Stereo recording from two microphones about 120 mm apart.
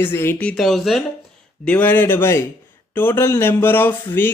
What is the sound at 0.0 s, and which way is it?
Speech, 20° left (ahead or behind).